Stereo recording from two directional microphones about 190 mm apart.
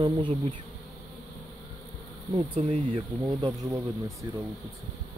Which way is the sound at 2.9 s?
20° right (ahead or behind).